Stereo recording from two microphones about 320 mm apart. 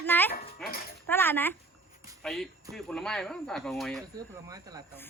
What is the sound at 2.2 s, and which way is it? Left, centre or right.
Speech, centre.